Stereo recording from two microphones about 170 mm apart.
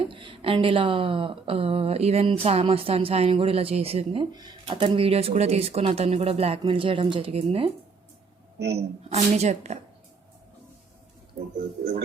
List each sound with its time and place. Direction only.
0.0 s speech: 30° right (ahead or behind)
8.5 s a man's voice: 80° right
9.0 s speech: 40° right (ahead or behind)